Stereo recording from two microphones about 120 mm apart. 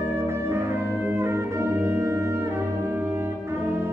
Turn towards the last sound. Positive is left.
turn(degrees=-20)  # may be behind; listen again after turning